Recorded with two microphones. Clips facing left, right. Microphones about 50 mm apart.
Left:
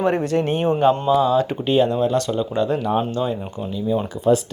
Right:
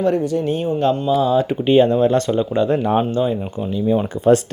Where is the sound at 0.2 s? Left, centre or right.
Left.